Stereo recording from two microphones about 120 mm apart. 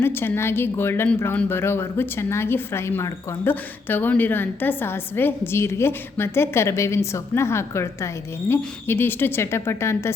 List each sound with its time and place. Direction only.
0.0 s a woman's voice: 20° left (ahead or behind)